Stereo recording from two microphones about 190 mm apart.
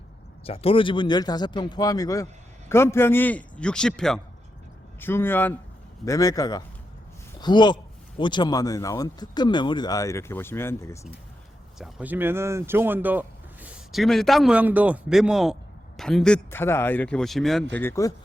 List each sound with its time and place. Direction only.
0.4 s speech: 30° left (ahead or behind); by 11.0 s 15° left (ahead or behind)
11.8 s speech: 10° right (ahead or behind); by 18.1 s 15° left (ahead or behind)